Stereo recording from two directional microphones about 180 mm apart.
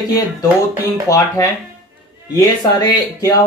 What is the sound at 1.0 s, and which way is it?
Speech, 20° left (ahead or behind).